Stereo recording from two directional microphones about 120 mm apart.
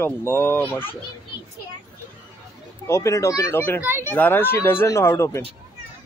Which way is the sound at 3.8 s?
20° right (ahead or behind).